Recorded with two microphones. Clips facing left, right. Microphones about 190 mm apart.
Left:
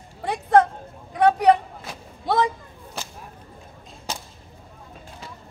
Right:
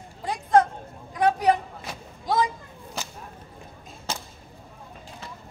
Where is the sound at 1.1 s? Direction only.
65° left (ahead or behind).